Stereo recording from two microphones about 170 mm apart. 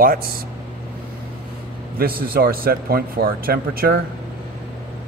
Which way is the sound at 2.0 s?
60° right (ahead or behind).